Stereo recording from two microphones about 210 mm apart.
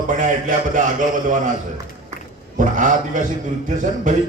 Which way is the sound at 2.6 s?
40° right (ahead or behind).